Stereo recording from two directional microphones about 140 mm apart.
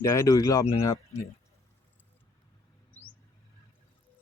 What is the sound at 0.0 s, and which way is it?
Speech, 20° left (ahead or behind).